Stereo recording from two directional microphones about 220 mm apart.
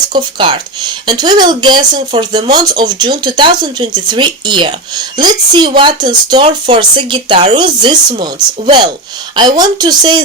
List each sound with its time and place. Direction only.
0.1 s speech: 20° right (ahead or behind)